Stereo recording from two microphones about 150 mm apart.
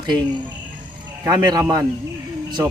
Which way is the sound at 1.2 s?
25° right (ahead or behind).